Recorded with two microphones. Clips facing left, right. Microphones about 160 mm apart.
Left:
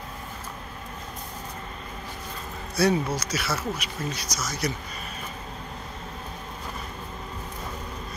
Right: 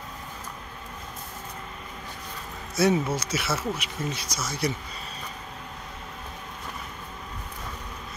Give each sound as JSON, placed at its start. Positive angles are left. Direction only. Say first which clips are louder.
{"t": 2.7, "sound": "speech", "louder": "even", "side_deg": -20}